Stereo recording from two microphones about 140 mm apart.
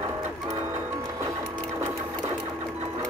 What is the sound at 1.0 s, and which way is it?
Music, 25° right (ahead or behind).